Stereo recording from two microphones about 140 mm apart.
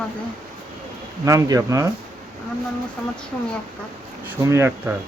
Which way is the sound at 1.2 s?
20° right (ahead or behind).